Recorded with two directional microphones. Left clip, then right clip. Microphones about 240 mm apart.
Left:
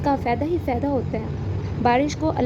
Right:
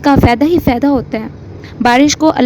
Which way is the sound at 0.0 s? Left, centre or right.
Right.